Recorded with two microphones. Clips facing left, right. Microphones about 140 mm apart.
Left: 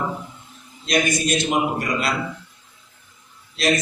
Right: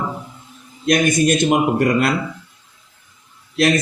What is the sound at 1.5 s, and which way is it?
Speech, 55° right (ahead or behind).